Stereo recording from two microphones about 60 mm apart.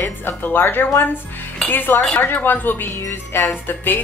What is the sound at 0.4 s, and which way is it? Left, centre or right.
Speech, left.